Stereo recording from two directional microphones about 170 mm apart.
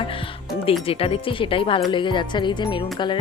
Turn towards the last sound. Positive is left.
turn(degrees=25)  # may be behind; listen again after turning